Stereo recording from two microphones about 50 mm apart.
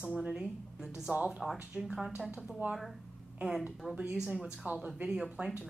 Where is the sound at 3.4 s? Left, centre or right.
Right.